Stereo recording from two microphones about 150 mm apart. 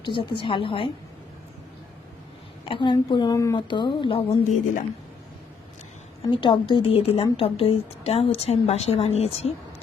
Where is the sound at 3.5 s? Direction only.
30° left (ahead or behind).